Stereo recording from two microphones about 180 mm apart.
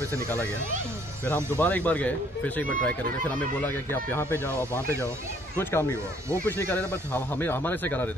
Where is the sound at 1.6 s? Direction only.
10° left (ahead or behind).